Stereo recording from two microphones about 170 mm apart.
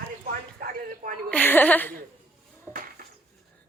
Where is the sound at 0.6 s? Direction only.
55° right (ahead or behind).